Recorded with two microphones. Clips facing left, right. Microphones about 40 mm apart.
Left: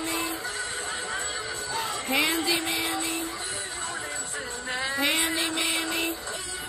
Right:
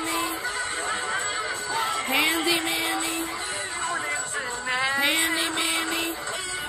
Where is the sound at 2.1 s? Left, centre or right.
Right.